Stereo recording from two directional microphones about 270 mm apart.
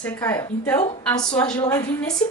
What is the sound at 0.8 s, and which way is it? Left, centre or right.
A woman's voice, centre.